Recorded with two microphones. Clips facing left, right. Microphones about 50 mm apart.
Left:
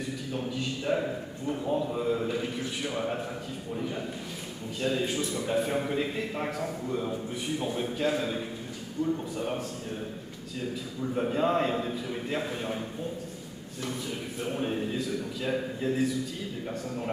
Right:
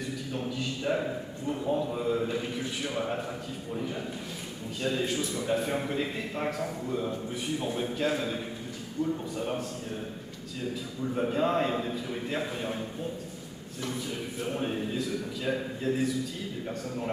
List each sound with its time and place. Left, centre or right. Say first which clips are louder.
0.3 s a man's voice: left 1 dB; centre
4.8 s a man's voice: left 1 dB; centre
11.1 s a man's voice: left 1 dB; centre
14.4 s a man's voice: left 1 dB; centre